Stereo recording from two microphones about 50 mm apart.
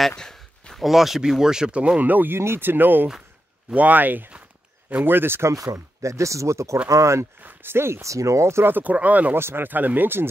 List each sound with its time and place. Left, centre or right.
0.1 s a sound: centre
0.8 s speech: centre
2.0 s speech: right
2.3 s speech: right
6.0 s speech: right
7.4 s speech: right
8.6 s speech: right
9.3 s speech: right
9.7 s speech: right